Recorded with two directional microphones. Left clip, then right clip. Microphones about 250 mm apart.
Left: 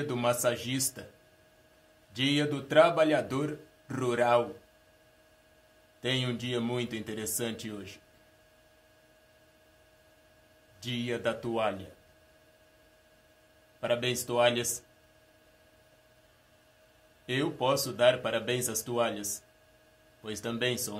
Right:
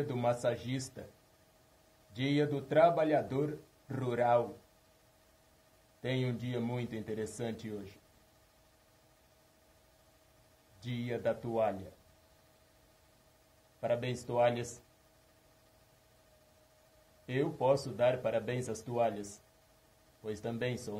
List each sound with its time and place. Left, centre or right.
0.1 s speech: centre
2.1 s speech: centre
6.0 s speech: centre
10.8 s speech: centre
13.7 s speech: centre
17.3 s speech: centre
20.2 s speech: centre